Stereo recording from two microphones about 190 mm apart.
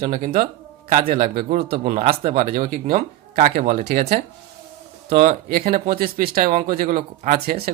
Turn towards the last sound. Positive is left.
turn(degrees=-50)  # may be behind; listen again after turning